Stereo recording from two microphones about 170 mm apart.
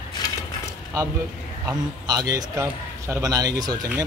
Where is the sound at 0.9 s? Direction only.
15° right (ahead or behind).